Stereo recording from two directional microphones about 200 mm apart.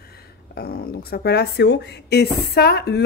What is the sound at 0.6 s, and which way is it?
Speech, 50° left (ahead or behind).